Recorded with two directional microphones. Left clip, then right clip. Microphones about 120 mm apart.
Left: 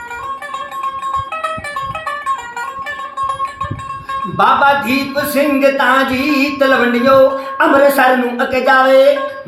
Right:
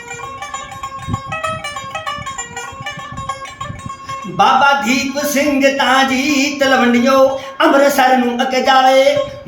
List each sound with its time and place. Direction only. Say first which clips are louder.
4.4 s speech: even; 20° right (ahead or behind)